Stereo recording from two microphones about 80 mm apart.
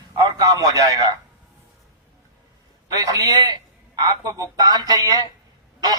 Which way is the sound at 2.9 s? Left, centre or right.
Right.